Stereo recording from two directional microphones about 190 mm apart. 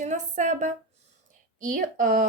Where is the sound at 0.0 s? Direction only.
40° right (ahead or behind).